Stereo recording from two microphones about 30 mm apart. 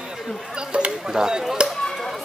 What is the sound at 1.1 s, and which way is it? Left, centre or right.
Speech, right.